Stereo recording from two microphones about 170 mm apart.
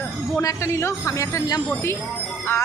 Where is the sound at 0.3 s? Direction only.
15° left (ahead or behind).